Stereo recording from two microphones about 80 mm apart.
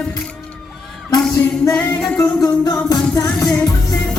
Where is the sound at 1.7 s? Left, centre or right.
Centre.